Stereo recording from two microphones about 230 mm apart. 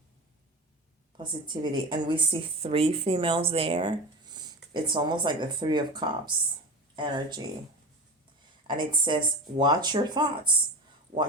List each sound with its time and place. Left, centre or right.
1.1 s a woman's voice: centre
8.6 s a woman's voice: centre